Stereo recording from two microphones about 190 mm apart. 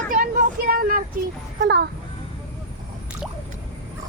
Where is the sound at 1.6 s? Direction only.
65° right (ahead or behind).